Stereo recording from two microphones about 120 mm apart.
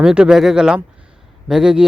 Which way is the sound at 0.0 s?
5° right (ahead or behind).